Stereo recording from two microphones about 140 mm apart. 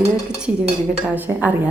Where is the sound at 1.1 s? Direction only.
15° right (ahead or behind).